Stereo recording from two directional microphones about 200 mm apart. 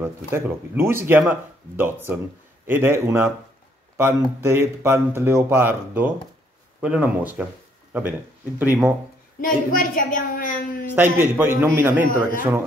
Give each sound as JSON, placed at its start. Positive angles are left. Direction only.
{"t": 0.0, "sound": "speech", "side_deg": -10}
{"t": 9.4, "sound": "a woman's voice", "side_deg": 45}
{"t": 11.0, "sound": "speech", "side_deg": -10}